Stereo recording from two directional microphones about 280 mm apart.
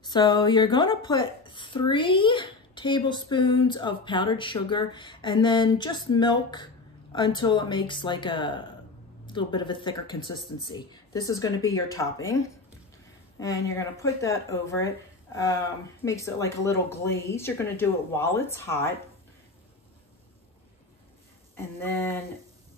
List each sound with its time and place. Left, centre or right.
0.0 s speech: centre
21.5 s speech: centre